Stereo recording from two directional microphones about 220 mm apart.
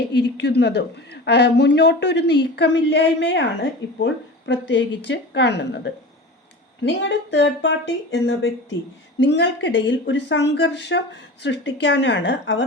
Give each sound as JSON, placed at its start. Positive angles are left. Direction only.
{"t": 0.1, "sound": "speech", "side_deg": 50}